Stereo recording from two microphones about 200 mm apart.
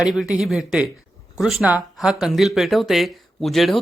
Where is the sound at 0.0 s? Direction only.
5° right (ahead or behind).